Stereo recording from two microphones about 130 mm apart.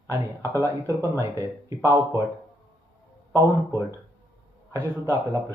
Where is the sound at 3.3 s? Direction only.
20° right (ahead or behind).